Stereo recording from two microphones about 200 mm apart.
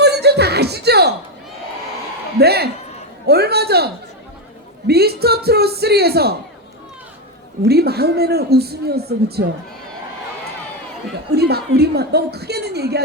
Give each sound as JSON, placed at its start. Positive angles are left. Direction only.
{"t": 0.0, "sound": "music", "side_deg": -55}
{"t": 2.4, "sound": "speech", "side_deg": -50}
{"t": 7.6, "sound": "speech", "side_deg": -50}
{"t": 11.3, "sound": "speech", "side_deg": -55}